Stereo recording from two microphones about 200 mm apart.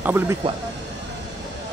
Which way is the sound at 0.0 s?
10° right (ahead or behind).